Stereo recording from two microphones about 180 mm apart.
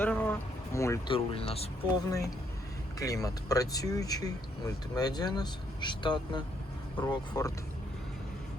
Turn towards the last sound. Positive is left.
turn(degrees=20)  # may be behind; listen again after turning